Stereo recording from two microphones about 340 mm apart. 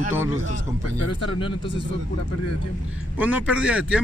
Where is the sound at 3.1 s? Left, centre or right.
Centre.